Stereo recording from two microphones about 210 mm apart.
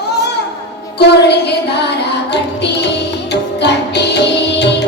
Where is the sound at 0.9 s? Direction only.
55° left (ahead or behind).